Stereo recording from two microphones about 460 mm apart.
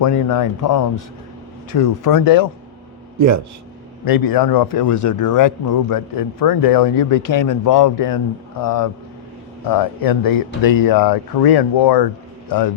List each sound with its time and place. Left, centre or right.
0.0 s speech: left
3.2 s a man's voice: right
4.0 s a man's voice: left